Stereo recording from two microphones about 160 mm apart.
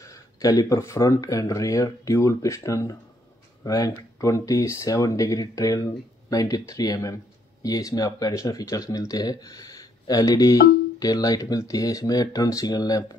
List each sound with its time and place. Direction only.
0.0 s speech: 20° left (ahead or behind)